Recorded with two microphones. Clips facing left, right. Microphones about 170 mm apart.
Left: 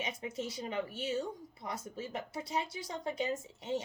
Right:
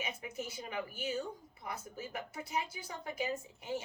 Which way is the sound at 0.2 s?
25° left (ahead or behind).